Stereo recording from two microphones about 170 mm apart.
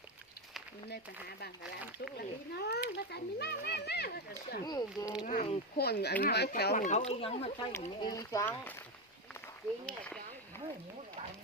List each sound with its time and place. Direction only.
2.1 s speech: 70° left (ahead or behind)
4.6 s speech: 25° left (ahead or behind)
5.2 s speech: 45° left (ahead or behind)
5.7 s speech: 70° left (ahead or behind)
6.7 s speech: 50° left (ahead or behind)
7.1 s speech: 35° left (ahead or behind)
7.7 s speech: 20° left (ahead or behind)